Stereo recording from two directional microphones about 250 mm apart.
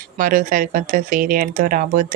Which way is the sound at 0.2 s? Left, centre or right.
Right.